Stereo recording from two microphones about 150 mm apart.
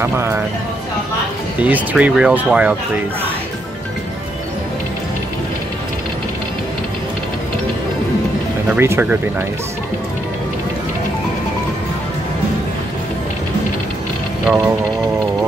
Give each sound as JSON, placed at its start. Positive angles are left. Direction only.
{"t": 0.0, "sound": "speech", "side_deg": -15}
{"t": 1.6, "sound": "speech", "side_deg": -10}
{"t": 8.7, "sound": "speech", "side_deg": -15}